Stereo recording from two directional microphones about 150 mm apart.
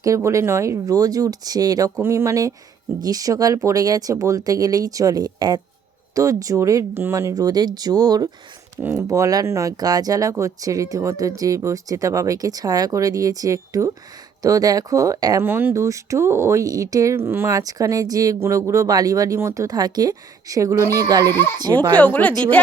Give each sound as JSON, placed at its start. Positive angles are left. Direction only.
{"t": 0.0, "sound": "speech", "side_deg": -20}
{"t": 21.2, "sound": "speech", "side_deg": 15}